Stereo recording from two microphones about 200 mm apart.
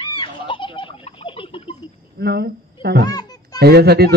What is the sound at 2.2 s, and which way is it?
Speech, 50° right (ahead or behind).